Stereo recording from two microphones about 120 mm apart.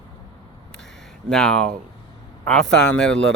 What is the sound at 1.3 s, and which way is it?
Speech, 5° left (ahead or behind).